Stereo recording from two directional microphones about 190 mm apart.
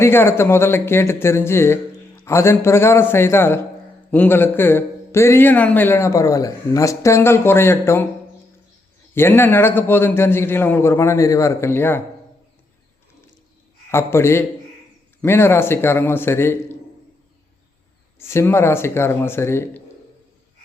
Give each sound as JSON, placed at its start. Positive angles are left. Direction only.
{"t": 0.0, "sound": "speech", "side_deg": 10}
{"t": 9.1, "sound": "speech", "side_deg": 10}
{"t": 13.9, "sound": "speech", "side_deg": 15}
{"t": 18.2, "sound": "speech", "side_deg": 15}